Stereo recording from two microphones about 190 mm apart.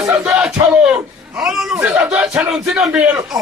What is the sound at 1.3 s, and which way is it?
A man's voice, 5° right (ahead or behind).